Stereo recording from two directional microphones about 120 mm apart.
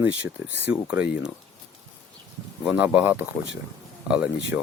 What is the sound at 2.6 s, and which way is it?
Speech, 5° right (ahead or behind).